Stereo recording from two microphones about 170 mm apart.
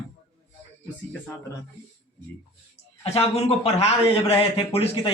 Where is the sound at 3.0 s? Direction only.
35° left (ahead or behind).